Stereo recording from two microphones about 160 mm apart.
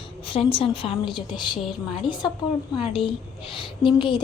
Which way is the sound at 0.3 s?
35° left (ahead or behind).